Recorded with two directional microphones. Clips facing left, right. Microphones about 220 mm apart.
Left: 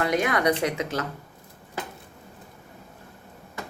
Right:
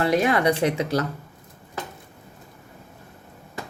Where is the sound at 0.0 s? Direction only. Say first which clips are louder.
Right 3 dB; 30° right (ahead or behind).